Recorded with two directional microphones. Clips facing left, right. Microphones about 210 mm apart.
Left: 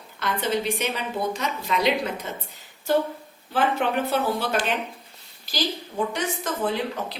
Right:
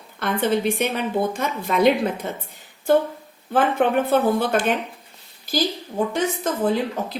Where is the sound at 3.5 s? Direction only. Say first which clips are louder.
Right 4 dB; 50° right (ahead or behind).